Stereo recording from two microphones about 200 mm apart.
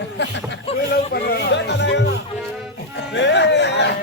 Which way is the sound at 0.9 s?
55° left (ahead or behind).